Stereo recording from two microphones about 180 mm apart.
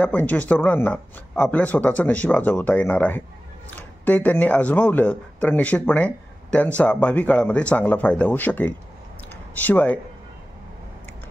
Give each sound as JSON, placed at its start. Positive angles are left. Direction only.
{"t": 0.0, "sound": "speech", "side_deg": 10}